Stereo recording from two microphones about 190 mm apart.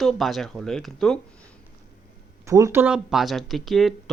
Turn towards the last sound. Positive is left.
turn(degrees=0)  # may be behind; listen again after turning